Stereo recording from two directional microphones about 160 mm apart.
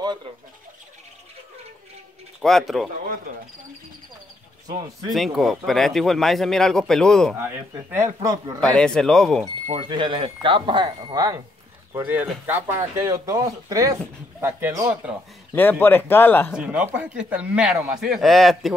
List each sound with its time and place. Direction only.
2.4 s speech: centre (ahead or behind)
4.6 s speech: 25° right (ahead or behind)
5.1 s speech: centre (ahead or behind)
7.3 s speech: 15° right (ahead or behind)
8.5 s speech: 5° left (ahead or behind)
9.7 s speech: 35° right (ahead or behind)
12.4 s speech: 15° right (ahead or behind)
15.5 s speech: 10° left (ahead or behind)
16.5 s speech: 10° right (ahead or behind)